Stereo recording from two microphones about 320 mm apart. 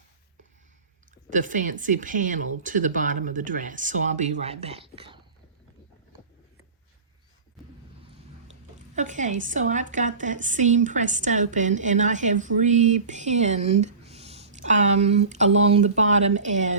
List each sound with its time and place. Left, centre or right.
1.3 s a woman's voice: right
9.0 s a woman's voice: right